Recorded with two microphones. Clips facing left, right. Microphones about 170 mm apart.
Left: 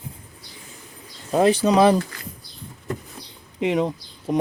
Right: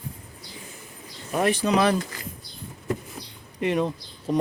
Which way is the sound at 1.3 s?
30° left (ahead or behind).